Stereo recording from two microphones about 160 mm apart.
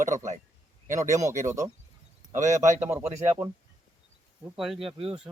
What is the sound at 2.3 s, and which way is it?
Speech, 50° right (ahead or behind).